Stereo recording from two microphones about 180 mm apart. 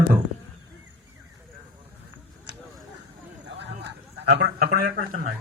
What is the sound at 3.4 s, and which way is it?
A man's voice, 70° right (ahead or behind).